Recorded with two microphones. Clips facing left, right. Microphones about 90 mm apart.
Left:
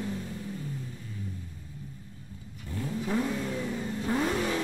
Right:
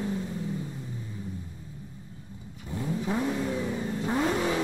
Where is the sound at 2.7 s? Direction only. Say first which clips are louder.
Right 1 dB; 20° right (ahead or behind).